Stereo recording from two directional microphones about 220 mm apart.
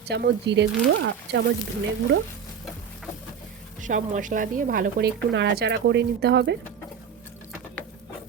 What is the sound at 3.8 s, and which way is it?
Speech, 35° right (ahead or behind).